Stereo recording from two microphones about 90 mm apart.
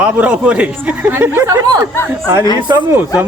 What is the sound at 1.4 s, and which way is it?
Speech, 45° right (ahead or behind).